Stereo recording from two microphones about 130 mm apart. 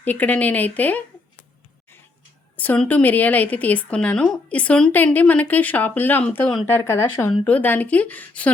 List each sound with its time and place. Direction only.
0.0 s a woman's voice: 15° left (ahead or behind)
2.6 s a woman's voice: 10° left (ahead or behind)